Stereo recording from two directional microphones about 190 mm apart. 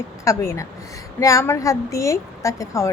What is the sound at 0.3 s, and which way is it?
Speech, 15° left (ahead or behind).